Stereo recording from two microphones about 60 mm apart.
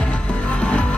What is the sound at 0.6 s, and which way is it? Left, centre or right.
Music, centre.